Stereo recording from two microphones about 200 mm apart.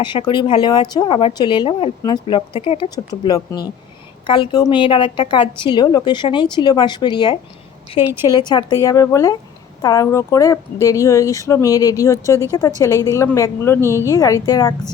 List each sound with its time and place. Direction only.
0.0 s speech: 25° left (ahead or behind)
8.0 s speech: 10° right (ahead or behind)
8.3 s speech: 20° left (ahead or behind)